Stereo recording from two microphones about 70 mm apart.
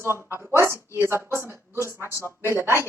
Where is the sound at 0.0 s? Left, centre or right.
Right.